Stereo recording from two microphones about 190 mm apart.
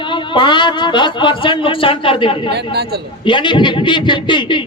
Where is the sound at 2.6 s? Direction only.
60° right (ahead or behind).